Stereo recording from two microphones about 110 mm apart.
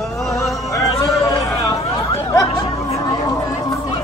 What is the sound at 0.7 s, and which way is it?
Chatter, 30° left (ahead or behind).